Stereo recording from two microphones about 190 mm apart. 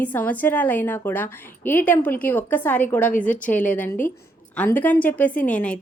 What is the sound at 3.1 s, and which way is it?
Speech, 45° left (ahead or behind).